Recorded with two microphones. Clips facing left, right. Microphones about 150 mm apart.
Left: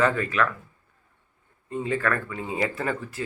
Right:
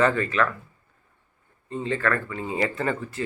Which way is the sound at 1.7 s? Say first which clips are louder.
Even; 10° left (ahead or behind).